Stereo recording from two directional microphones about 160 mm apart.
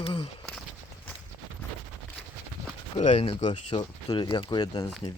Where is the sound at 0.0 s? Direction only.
35° left (ahead or behind).